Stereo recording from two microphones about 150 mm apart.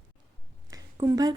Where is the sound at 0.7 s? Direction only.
25° right (ahead or behind).